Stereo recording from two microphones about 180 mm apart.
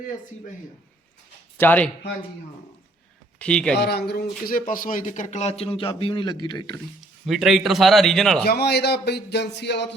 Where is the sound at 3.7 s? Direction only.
65° left (ahead or behind); by 6.7 s 25° left (ahead or behind).